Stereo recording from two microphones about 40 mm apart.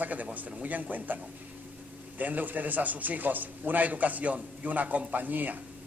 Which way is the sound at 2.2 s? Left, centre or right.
Right.